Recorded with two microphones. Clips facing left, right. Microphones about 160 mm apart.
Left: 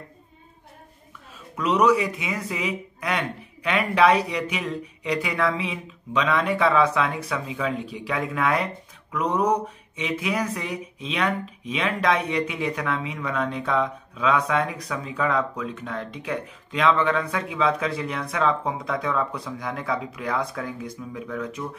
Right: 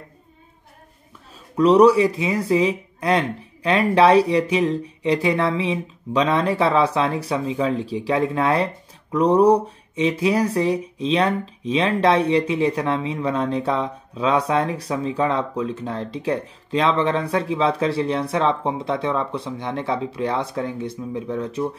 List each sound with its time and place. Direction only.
1.6 s speech: 35° right (ahead or behind)